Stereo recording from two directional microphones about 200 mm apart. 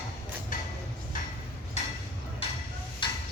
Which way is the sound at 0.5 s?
40° left (ahead or behind).